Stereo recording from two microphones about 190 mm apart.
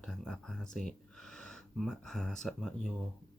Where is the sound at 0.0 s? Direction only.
5° left (ahead or behind).